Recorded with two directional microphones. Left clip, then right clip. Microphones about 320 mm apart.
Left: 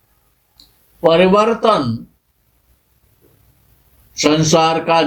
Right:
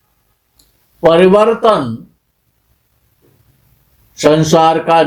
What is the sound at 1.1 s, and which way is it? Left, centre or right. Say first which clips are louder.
Speech: right 4 dB; right.